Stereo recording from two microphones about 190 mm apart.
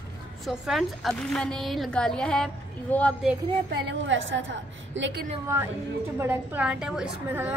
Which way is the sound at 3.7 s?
80° right.